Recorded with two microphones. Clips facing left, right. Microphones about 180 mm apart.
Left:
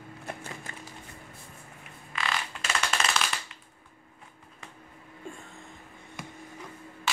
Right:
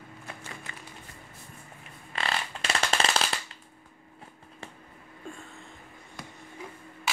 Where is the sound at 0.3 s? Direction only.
45° left (ahead or behind).